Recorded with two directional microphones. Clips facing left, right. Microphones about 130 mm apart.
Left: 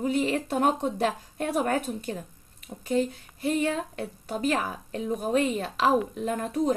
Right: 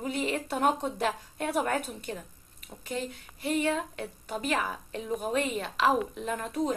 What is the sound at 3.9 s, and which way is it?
A woman's voice, 35° left (ahead or behind).